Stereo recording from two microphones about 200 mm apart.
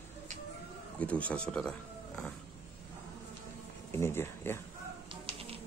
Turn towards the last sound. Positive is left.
turn(degrees=-30)  # may be behind; listen again after turning